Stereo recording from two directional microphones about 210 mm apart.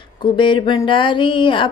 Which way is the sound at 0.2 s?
20° left (ahead or behind).